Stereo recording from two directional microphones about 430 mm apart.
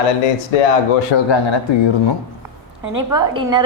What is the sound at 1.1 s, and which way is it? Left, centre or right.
Speech, left.